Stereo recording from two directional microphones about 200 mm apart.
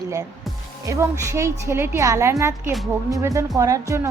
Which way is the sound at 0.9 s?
15° right (ahead or behind).